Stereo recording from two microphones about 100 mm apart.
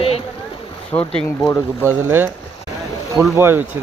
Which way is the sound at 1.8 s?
25° right (ahead or behind).